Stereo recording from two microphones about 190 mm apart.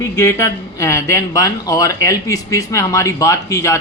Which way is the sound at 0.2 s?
15° left (ahead or behind).